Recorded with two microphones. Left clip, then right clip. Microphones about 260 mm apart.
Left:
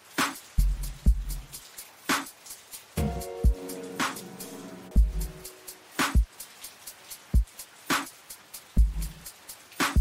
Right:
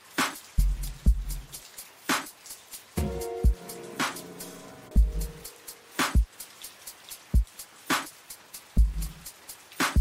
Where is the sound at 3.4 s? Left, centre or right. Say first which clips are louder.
Left 1 dB; centre.